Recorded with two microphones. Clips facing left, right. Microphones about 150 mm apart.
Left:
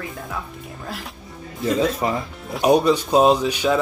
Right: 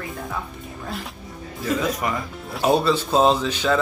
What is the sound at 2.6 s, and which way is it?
Speech, 15° left (ahead or behind).